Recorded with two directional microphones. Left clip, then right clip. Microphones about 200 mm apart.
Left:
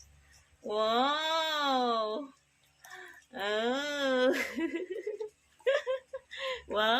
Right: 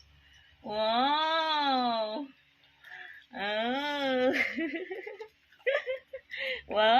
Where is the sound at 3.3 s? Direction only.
10° left (ahead or behind).